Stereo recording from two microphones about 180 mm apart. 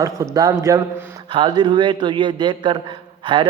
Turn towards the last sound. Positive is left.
turn(degrees=-25)  # may be behind; listen again after turning